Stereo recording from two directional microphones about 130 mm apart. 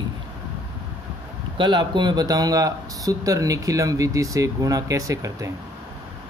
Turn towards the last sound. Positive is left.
turn(degrees=-25)  # may be behind; listen again after turning